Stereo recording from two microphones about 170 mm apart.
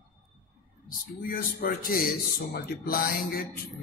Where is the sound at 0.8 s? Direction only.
55° left (ahead or behind).